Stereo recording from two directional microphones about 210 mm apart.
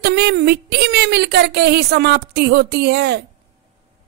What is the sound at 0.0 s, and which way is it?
Speech, 50° right (ahead or behind).